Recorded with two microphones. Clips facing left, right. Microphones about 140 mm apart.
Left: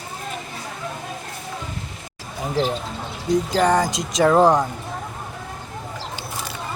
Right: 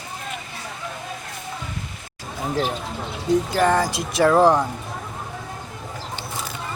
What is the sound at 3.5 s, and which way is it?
Speech, 20° left (ahead or behind).